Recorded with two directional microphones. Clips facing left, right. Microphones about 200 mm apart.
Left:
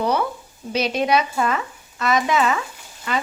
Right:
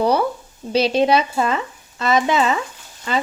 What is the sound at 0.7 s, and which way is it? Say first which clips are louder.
Speech: right 4 dB; 30° right (ahead or behind).